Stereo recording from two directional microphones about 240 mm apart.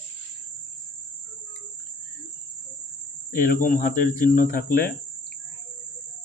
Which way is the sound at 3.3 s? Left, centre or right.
Left.